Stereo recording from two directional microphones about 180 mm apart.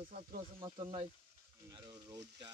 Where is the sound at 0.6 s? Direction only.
25° right (ahead or behind).